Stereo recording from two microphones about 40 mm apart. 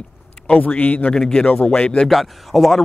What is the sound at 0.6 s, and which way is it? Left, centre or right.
Speech, left.